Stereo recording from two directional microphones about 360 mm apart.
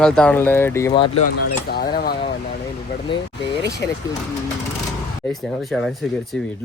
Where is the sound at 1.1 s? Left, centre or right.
Left.